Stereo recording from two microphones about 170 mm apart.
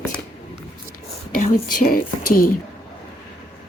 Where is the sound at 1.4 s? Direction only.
50° left (ahead or behind).